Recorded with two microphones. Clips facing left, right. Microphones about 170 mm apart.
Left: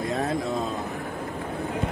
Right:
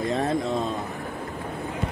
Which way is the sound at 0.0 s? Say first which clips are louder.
Right 2 dB; centre (ahead or behind).